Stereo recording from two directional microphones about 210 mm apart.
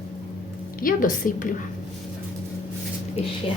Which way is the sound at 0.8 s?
40° left (ahead or behind).